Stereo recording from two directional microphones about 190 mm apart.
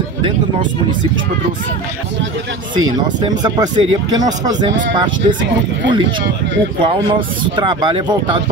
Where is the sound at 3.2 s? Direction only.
20° right (ahead or behind).